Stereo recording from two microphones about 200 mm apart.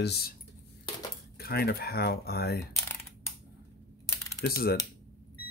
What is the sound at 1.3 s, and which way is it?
Speech, 50° left (ahead or behind).